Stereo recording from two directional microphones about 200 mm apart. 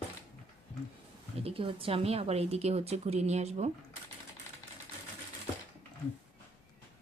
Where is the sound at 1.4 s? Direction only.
30° right (ahead or behind).